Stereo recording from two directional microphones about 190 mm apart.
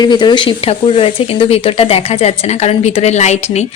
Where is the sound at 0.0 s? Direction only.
25° left (ahead or behind).